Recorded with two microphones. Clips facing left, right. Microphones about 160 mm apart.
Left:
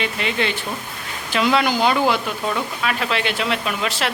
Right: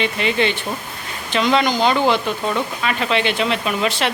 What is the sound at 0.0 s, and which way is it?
Speech, centre (ahead or behind).